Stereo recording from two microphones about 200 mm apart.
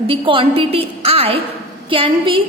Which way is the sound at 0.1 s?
25° right (ahead or behind).